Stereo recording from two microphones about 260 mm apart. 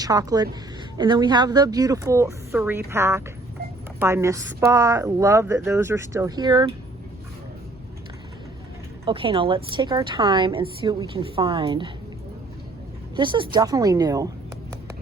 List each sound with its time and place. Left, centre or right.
0.0 s speech: centre
9.0 s a woman's voice: centre
13.1 s speech: centre